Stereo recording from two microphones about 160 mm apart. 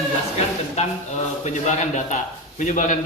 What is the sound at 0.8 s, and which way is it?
Speech, 45° left (ahead or behind).